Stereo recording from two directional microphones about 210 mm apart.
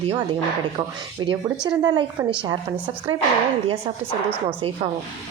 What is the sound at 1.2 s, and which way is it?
Speech, 20° right (ahead or behind).